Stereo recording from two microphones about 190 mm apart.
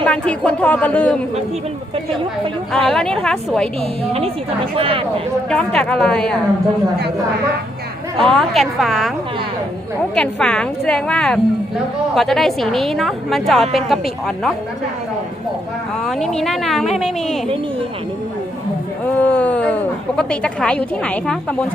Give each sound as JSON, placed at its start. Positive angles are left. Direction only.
{"t": 0.0, "sound": "a woman's voice", "side_deg": 5}
{"t": 2.7, "sound": "a woman's voice", "side_deg": 5}
{"t": 4.8, "sound": "speech", "side_deg": -30}
{"t": 5.5, "sound": "a woman's voice", "side_deg": 5}
{"t": 8.2, "sound": "a woman's voice", "side_deg": 0}
{"t": 10.2, "sound": "a woman's voice", "side_deg": 5}
{"t": 16.0, "sound": "a woman's voice", "side_deg": 0}
{"t": 19.1, "sound": "a woman's voice", "side_deg": 5}